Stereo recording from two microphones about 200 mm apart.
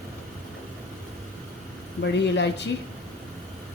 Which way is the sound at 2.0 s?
60° left (ahead or behind).